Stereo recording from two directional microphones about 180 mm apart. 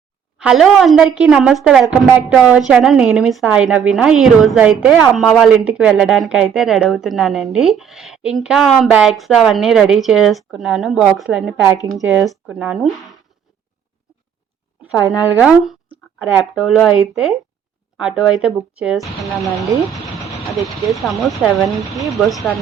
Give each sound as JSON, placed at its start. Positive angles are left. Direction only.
{"t": 0.3, "sound": "speech", "side_deg": -5}
{"t": 14.9, "sound": "a woman's voice", "side_deg": 20}
{"t": 15.2, "sound": "speech", "side_deg": -5}
{"t": 20.7, "sound": "speech", "side_deg": 0}